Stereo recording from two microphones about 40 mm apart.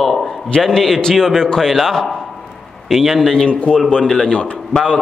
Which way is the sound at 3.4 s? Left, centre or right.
Left.